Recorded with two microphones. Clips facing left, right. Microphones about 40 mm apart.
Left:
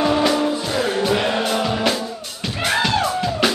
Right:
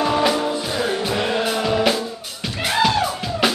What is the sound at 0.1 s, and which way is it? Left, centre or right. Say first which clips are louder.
Music: left 1 dB; centre.